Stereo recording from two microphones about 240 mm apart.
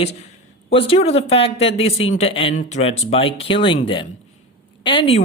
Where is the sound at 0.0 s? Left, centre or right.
Left.